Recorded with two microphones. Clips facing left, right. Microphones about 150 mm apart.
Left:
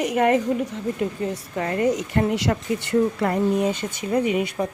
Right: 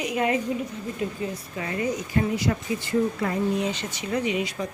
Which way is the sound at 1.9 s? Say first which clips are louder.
Left 3 dB; 80° left.